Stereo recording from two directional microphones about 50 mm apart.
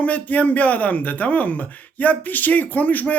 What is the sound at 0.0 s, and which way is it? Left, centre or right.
Speech, left.